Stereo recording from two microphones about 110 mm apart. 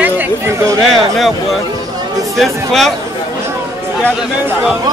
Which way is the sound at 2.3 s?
Centre (ahead or behind).